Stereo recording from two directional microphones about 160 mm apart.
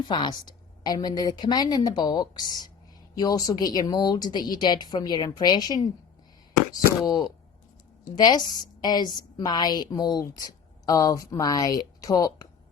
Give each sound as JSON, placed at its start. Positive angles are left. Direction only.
{"t": 0.1, "sound": "a woman's voice", "side_deg": 25}